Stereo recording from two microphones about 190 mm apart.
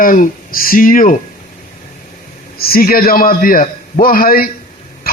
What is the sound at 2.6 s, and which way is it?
A man's voice, 50° left (ahead or behind).